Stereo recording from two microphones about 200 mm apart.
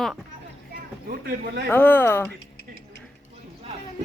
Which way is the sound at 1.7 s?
10° left (ahead or behind).